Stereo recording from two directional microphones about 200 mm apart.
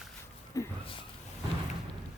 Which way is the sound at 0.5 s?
15° left (ahead or behind).